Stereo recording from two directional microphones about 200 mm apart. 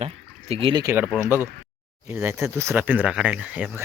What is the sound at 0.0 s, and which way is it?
Speech, 30° right (ahead or behind).